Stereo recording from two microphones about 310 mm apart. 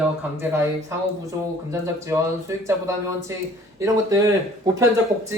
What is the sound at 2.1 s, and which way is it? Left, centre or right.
Speech, centre.